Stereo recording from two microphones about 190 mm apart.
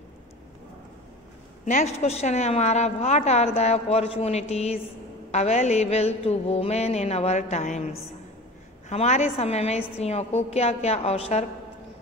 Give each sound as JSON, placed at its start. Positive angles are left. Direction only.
{"t": 1.7, "sound": "a woman's voice", "side_deg": 35}